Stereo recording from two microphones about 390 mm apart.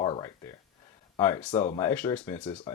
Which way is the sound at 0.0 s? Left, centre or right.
Centre.